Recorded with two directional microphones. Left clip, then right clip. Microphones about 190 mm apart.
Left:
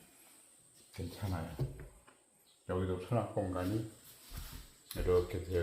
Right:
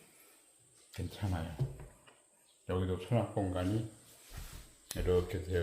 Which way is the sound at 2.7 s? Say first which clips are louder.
Right 1 dB; 25° right (ahead or behind).